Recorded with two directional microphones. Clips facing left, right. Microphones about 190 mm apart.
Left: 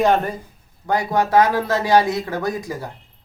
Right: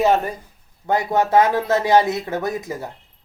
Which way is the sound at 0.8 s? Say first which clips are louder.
Right 1 dB; 25° right (ahead or behind).